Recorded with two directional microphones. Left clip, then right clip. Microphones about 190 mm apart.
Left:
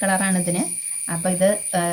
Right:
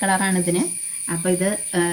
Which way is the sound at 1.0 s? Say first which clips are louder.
Left 3 dB; 25° left (ahead or behind).